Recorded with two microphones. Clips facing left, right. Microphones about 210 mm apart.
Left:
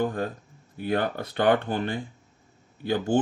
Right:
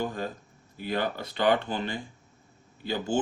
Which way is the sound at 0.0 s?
55° left (ahead or behind).